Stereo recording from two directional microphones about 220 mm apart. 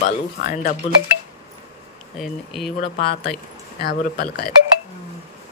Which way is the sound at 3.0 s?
45° left (ahead or behind).